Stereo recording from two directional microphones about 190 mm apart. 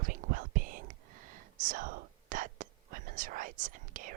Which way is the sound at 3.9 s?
45° right (ahead or behind).